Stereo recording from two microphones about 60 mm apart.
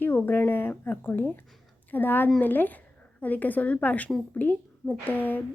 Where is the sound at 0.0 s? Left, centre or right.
Left.